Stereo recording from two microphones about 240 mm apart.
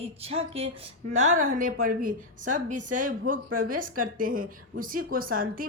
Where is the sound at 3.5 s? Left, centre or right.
Right.